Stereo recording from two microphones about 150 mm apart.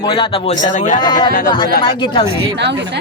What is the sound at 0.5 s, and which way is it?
Speech, 55° left (ahead or behind).